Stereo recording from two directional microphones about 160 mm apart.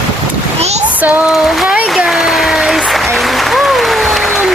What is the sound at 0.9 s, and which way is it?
Applause, 5° right (ahead or behind).